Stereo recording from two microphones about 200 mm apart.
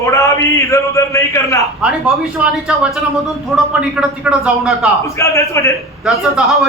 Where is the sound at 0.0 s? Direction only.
15° left (ahead or behind).